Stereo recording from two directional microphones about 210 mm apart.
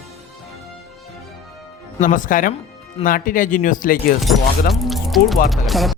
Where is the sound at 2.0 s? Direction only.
40° left (ahead or behind).